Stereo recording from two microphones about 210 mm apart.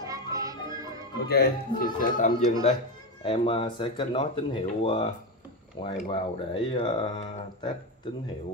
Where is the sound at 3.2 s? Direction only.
25° left (ahead or behind).